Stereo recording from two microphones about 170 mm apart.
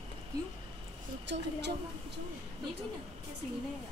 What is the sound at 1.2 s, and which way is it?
Speech, 90° right.